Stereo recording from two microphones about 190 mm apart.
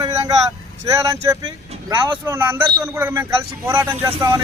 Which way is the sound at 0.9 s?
15° right (ahead or behind).